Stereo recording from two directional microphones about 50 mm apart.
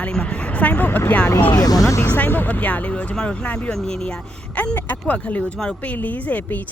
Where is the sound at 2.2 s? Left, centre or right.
Left.